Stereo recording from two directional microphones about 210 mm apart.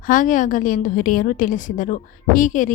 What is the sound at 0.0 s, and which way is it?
A woman's voice, 40° left (ahead or behind).